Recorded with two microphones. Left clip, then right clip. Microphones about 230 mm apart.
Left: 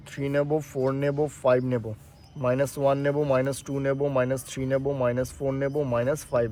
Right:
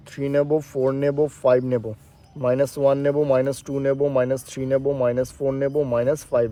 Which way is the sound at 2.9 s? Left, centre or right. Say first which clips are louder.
Right 5 dB; right.